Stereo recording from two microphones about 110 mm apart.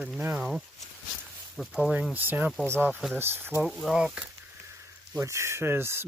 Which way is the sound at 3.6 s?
Centre (ahead or behind).